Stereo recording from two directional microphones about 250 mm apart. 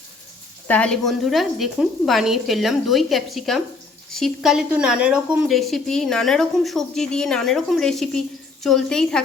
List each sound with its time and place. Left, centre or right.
0.7 s speech: centre